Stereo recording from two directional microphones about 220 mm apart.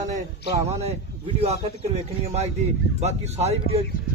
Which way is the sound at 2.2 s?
30° right (ahead or behind).